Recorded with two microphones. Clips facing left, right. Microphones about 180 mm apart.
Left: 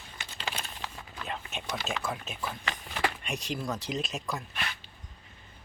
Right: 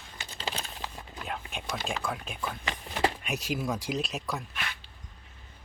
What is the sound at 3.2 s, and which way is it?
Speech, 5° right (ahead or behind).